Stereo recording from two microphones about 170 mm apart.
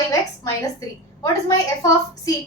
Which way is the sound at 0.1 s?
20° left (ahead or behind).